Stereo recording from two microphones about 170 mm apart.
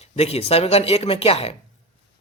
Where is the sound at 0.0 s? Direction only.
40° left (ahead or behind).